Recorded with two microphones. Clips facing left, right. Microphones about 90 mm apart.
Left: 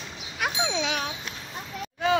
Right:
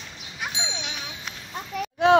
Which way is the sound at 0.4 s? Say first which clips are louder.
Left 6 dB; 65° left (ahead or behind).